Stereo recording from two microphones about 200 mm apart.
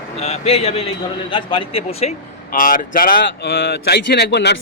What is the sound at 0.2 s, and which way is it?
Speech, 30° left (ahead or behind).